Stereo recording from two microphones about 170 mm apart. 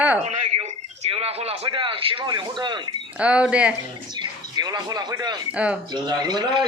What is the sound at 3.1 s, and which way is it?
Speech, 5° right (ahead or behind).